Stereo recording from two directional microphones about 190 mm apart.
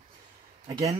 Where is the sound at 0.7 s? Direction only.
20° right (ahead or behind).